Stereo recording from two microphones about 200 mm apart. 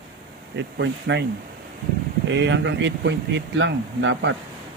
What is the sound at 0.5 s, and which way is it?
Speech, 60° right (ahead or behind).